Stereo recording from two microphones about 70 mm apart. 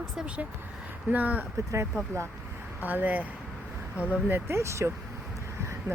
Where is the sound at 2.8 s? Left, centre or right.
Right.